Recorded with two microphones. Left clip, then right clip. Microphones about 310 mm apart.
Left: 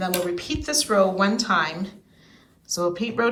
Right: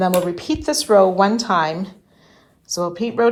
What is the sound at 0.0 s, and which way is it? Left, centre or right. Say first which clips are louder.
Speech: right 7 dB; centre.